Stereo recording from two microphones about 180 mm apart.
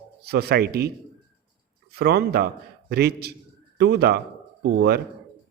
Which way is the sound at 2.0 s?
60° right (ahead or behind).